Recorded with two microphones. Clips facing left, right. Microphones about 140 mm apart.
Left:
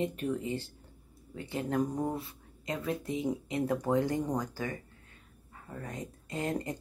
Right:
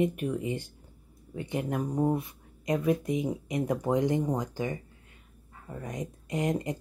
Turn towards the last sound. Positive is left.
turn(degrees=-15)  # may be behind; listen again after turning